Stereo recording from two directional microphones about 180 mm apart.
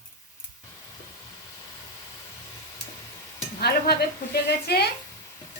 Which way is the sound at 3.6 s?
60° left (ahead or behind).